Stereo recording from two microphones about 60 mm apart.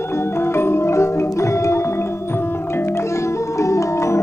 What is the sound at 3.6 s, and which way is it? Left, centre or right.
Music, left.